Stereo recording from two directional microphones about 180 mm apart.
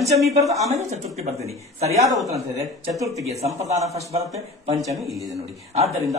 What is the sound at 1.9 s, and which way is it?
Speech, 15° right (ahead or behind).